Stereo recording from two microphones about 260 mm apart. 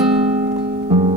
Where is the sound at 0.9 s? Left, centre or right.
Right.